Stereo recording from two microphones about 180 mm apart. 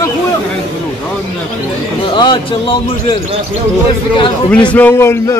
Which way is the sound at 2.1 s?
25° left (ahead or behind).